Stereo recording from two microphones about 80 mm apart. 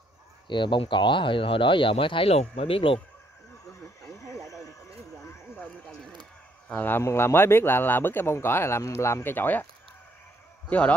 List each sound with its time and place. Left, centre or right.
0.5 s speech: left
4.2 s a sound: left
6.7 s speech: left
7.0 s speech: left
10.7 s speech: centre